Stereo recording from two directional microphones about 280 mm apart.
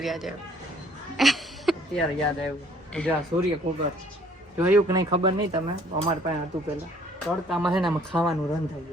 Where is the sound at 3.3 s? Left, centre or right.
Right.